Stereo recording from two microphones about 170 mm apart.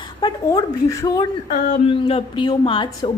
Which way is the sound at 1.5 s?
55° left (ahead or behind).